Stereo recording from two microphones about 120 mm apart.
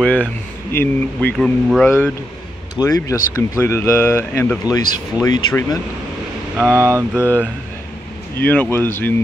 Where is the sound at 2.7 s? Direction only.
30° left (ahead or behind).